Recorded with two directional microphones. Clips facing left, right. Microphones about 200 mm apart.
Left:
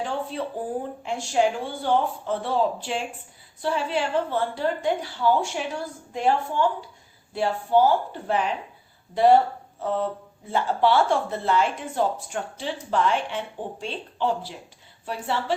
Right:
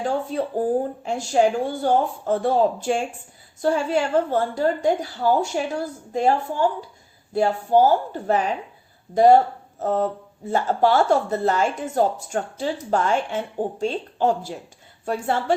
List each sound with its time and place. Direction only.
0.0 s a woman's voice: 45° right (ahead or behind)